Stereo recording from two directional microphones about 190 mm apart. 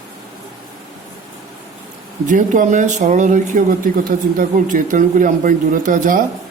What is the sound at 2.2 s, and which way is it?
Speech, 40° right (ahead or behind).